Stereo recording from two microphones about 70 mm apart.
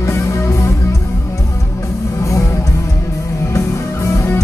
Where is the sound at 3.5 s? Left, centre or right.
Left.